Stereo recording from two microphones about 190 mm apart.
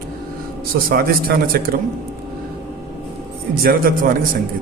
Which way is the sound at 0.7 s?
50° right (ahead or behind).